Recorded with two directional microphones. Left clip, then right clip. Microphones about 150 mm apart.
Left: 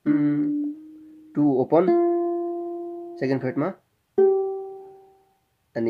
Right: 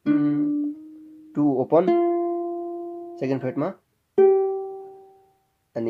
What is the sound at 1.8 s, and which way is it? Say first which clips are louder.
Speech: even; 15° right (ahead or behind).